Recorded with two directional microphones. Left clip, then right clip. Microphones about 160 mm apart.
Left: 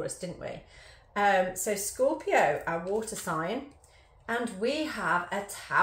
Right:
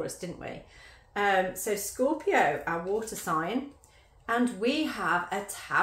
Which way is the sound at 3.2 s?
20° right (ahead or behind).